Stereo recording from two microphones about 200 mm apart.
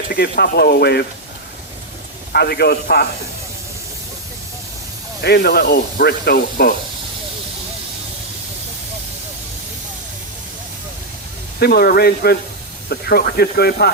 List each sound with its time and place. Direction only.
0.1 s speech: 50° left (ahead or behind)
2.3 s speech: 50° left (ahead or behind)
5.2 s speech: 55° left (ahead or behind)
11.6 s speech: 50° left (ahead or behind)